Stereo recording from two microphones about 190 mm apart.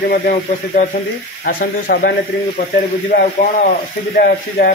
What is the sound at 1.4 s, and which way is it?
Speech, 50° left (ahead or behind).